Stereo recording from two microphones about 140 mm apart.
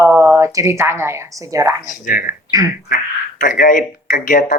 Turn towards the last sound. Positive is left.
turn(degrees=70)  # may be behind; listen again after turning